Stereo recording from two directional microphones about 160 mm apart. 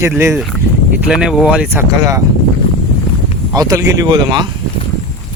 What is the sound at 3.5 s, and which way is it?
Speech, 20° right (ahead or behind).